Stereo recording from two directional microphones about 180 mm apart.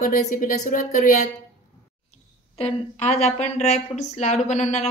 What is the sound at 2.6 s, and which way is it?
A woman's voice, 40° left (ahead or behind).